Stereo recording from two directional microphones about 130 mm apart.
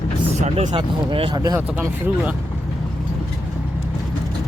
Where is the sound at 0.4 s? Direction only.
65° right (ahead or behind).